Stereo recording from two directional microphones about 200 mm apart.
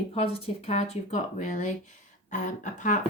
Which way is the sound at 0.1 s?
30° left (ahead or behind).